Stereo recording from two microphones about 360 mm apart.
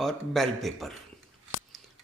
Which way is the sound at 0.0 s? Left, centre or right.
Centre.